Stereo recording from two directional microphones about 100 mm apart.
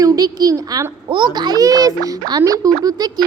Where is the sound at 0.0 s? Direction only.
35° right (ahead or behind).